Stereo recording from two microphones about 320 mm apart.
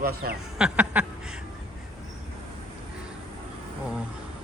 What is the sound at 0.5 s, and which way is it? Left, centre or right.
Duck, centre.